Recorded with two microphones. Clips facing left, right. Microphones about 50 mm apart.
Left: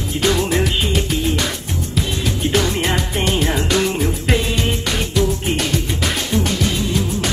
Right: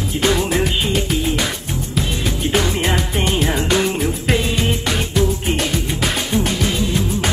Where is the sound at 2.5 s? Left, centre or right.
Centre.